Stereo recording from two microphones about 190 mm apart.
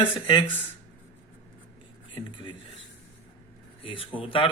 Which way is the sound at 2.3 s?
25° left (ahead or behind).